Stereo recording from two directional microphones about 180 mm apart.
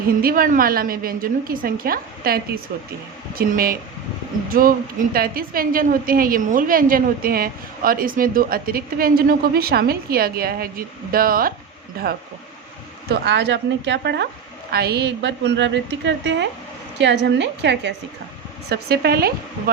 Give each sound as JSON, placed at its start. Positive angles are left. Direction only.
{"t": 0.2, "sound": "a woman's voice", "side_deg": -55}
{"t": 13.1, "sound": "a woman's voice", "side_deg": -75}
{"t": 18.7, "sound": "speech", "side_deg": -60}